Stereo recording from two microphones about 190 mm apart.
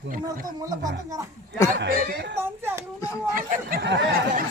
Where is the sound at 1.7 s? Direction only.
50° right (ahead or behind).